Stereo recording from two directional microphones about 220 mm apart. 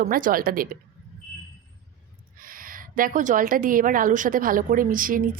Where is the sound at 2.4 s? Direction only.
40° right (ahead or behind).